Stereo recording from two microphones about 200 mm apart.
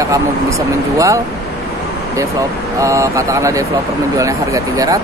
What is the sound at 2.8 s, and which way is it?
Speech, 15° right (ahead or behind).